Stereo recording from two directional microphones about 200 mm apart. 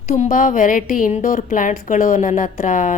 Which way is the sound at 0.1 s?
40° left (ahead or behind).